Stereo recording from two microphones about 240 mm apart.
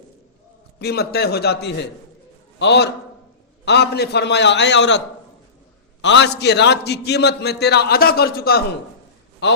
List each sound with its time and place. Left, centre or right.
0.8 s a man's voice: left